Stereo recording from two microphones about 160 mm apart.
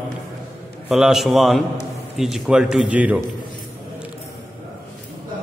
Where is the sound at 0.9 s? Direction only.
5° right (ahead or behind).